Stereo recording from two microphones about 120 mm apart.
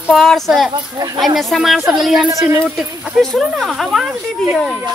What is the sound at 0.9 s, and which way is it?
Speech, 35° right (ahead or behind).